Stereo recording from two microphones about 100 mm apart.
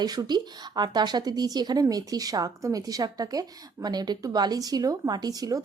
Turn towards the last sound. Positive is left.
turn(degrees=-35)  # may be behind; listen again after turning